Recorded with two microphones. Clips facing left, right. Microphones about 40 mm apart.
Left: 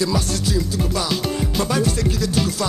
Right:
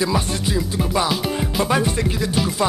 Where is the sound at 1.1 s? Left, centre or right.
Centre.